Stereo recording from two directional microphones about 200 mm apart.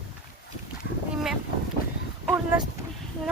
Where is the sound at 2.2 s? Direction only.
10° right (ahead or behind).